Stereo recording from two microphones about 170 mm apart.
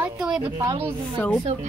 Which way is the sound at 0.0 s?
5° right (ahead or behind).